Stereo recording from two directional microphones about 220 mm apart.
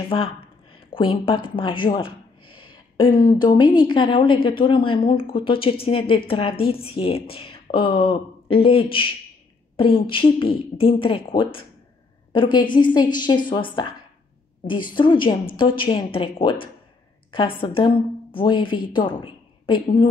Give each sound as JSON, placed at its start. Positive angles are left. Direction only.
{"t": 0.1, "sound": "speech", "side_deg": 25}
{"t": 15.0, "sound": "a woman's voice", "side_deg": 20}